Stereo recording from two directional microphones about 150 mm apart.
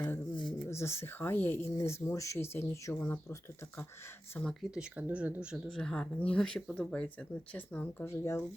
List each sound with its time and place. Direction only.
0.3 s a sound: 30° left (ahead or behind)
0.7 s speech: 20° left (ahead or behind)
4.4 s speech: 5° right (ahead or behind)
5.6 s speech: 5° left (ahead or behind)